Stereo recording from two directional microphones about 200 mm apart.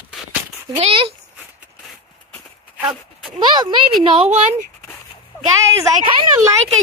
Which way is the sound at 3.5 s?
25° right (ahead or behind).